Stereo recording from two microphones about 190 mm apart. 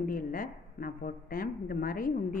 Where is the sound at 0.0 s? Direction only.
45° left (ahead or behind).